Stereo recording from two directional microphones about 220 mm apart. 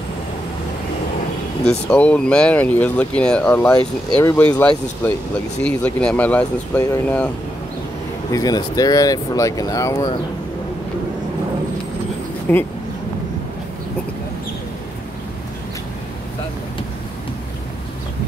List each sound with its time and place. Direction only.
1.6 s speech: 5° left (ahead or behind)
8.3 s speech: 15° left (ahead or behind)
12.5 s speech: 10° left (ahead or behind)